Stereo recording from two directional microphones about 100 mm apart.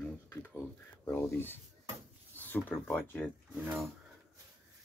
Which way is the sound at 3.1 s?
15° left (ahead or behind).